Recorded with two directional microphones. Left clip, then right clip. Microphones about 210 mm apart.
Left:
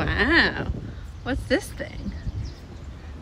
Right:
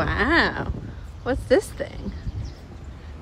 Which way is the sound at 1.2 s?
10° right (ahead or behind).